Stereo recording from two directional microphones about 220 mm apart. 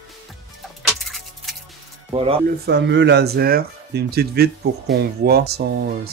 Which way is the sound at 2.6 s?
50° right (ahead or behind).